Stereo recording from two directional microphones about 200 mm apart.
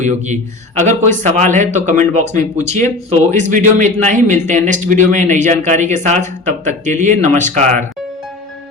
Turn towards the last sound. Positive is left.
turn(degrees=-40)  # may be behind; listen again after turning